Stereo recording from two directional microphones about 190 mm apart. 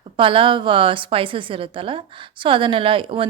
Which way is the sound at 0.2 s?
25° right (ahead or behind).